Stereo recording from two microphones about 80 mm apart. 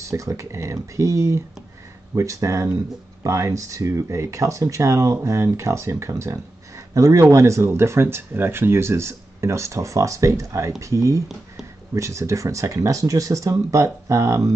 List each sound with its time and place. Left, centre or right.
0.0 s speech: right